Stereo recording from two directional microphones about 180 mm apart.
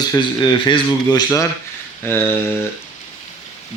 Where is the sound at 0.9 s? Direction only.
15° left (ahead or behind).